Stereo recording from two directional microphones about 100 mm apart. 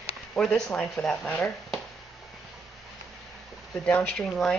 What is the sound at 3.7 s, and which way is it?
Speech, 15° left (ahead or behind).